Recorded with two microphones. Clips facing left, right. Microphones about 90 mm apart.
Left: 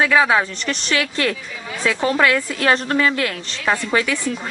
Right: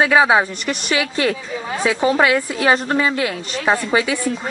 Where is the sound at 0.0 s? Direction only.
20° right (ahead or behind).